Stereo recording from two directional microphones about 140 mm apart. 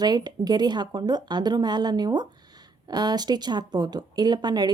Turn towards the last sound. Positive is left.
turn(degrees=-30)  # may be behind; listen again after turning